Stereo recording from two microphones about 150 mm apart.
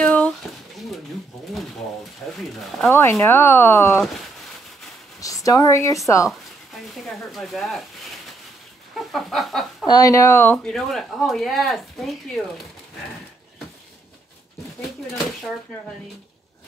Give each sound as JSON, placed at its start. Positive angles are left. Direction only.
{"t": 0.0, "sound": "a sound", "side_deg": 10}
{"t": 2.9, "sound": "speech", "side_deg": 15}
{"t": 5.2, "sound": "a woman's voice", "side_deg": 20}
{"t": 6.7, "sound": "speech", "side_deg": 0}
{"t": 9.1, "sound": "a sound", "side_deg": 0}
{"t": 9.8, "sound": "speech", "side_deg": 25}